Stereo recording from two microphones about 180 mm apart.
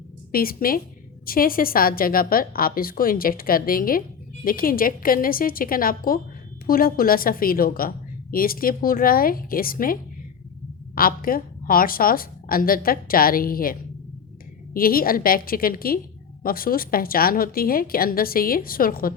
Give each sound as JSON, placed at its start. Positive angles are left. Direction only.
{"t": 0.3, "sound": "a woman's voice", "side_deg": 55}